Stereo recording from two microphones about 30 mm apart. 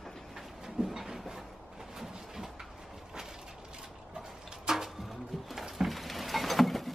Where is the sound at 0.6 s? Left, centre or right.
Centre.